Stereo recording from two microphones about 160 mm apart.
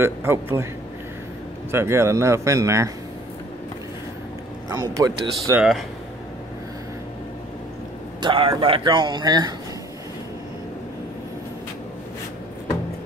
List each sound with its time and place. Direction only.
0.0 s a man's voice: 15° right (ahead or behind)
1.7 s a man's voice: 15° right (ahead or behind)
4.6 s speech: 20° right (ahead or behind)
5.6 s speech: centre (ahead or behind)
8.2 s speech: 30° right (ahead or behind)